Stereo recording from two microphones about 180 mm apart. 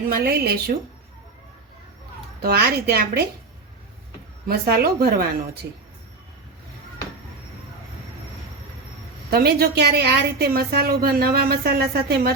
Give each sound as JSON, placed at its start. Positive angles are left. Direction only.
{"t": 0.1, "sound": "a woman's voice", "side_deg": -60}
{"t": 2.4, "sound": "a woman's voice", "side_deg": -60}
{"t": 4.4, "sound": "a woman's voice", "side_deg": -60}
{"t": 9.3, "sound": "a woman's voice", "side_deg": -60}